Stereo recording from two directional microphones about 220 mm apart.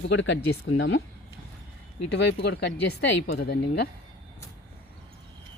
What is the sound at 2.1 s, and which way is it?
Speech, 50° left (ahead or behind).